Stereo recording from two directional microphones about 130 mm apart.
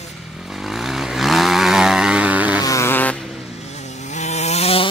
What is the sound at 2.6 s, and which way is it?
Vehicle, 20° left (ahead or behind).